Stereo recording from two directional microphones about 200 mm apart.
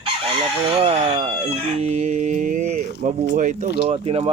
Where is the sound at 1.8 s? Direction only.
35° right (ahead or behind).